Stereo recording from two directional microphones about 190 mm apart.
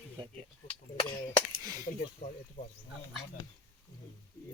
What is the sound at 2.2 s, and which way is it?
Speech, 35° left (ahead or behind).